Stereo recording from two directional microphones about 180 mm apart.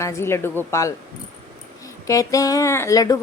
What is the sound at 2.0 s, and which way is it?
Speech, 20° left (ahead or behind).